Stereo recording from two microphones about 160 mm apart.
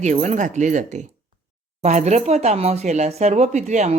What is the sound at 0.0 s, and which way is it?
Speech, 50° right (ahead or behind).